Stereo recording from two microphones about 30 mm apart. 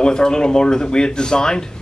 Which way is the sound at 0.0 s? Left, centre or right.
Left.